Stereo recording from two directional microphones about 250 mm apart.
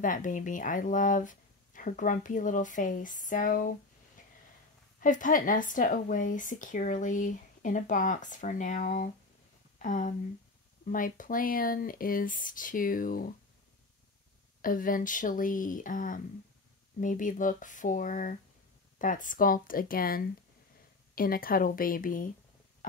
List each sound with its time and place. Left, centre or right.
0.0 s speech: left
5.0 s speech: left
14.6 s speech: left